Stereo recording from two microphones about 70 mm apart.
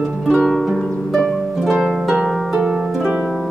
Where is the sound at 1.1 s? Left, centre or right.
Centre.